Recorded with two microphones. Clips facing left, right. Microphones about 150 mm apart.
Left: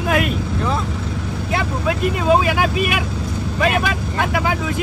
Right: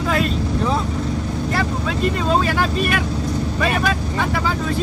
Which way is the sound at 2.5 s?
10° left (ahead or behind).